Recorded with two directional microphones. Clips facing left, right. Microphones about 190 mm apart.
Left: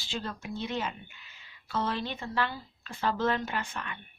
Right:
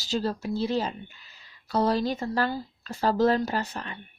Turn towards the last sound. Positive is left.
turn(degrees=-35)  # may be behind; listen again after turning